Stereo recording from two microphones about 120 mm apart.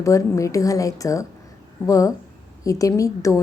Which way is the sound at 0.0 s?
25° left (ahead or behind).